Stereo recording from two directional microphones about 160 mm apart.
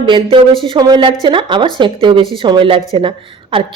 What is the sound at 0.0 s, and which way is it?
A woman's voice, 30° right (ahead or behind).